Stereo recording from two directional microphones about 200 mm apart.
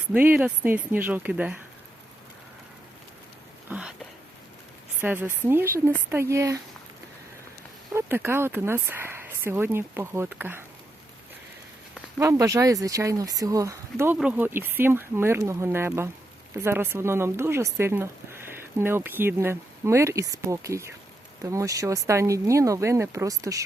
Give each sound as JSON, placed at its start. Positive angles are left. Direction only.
{"t": 0.1, "sound": "speech", "side_deg": -5}
{"t": 3.7, "sound": "a sound", "side_deg": -5}
{"t": 4.9, "sound": "speech", "side_deg": -10}
{"t": 7.9, "sound": "speech", "side_deg": -10}
{"t": 12.2, "sound": "speech", "side_deg": -15}